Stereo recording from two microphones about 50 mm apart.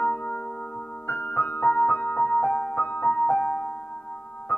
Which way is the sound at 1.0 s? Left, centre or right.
Left.